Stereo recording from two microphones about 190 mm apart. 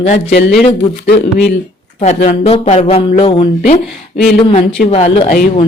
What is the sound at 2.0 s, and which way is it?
A woman's voice, 35° left (ahead or behind).